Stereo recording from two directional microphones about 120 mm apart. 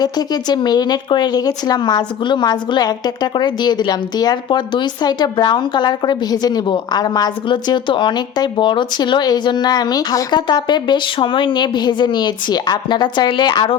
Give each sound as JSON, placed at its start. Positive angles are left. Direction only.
{"t": 0.0, "sound": "speech", "side_deg": 35}